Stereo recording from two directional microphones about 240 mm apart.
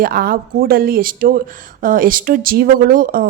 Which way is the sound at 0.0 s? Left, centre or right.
Right.